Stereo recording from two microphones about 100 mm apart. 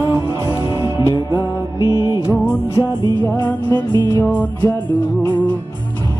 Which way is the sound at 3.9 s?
45° right (ahead or behind).